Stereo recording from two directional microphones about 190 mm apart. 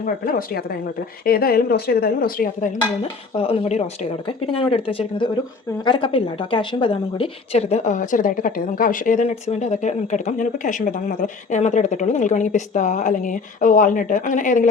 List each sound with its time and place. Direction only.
0.0 s speech: 50° left (ahead or behind)
3.3 s a woman's voice: 30° left (ahead or behind)